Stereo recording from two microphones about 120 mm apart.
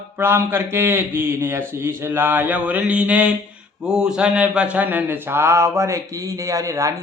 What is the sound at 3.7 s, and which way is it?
Speech, 5° right (ahead or behind).